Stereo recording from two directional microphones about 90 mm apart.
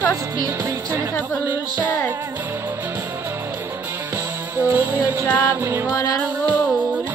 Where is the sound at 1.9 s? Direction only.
20° left (ahead or behind).